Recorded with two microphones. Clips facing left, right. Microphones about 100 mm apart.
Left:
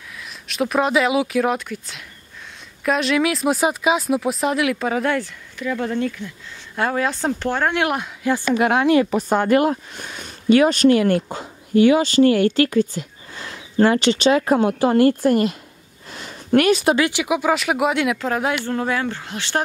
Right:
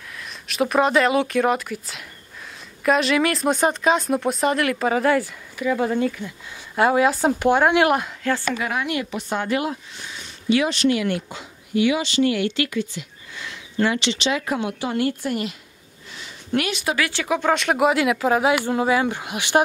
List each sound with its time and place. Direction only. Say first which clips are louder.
0.2 s speech: even; centre (ahead or behind)
7.8 s speech: right 3 dB; centre (ahead or behind)
8.2 s speech: left 2 dB; 15° left (ahead or behind)
8.8 s speech: left 10 dB; 40° left (ahead or behind)
16.1 s a sound: left 7 dB; 50° left (ahead or behind)
16.9 s speech: left 4 dB; 20° left (ahead or behind); by 19.6 s 15° right (ahead or behind)